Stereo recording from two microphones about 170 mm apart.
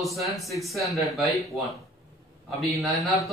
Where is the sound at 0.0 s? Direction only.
Centre (ahead or behind).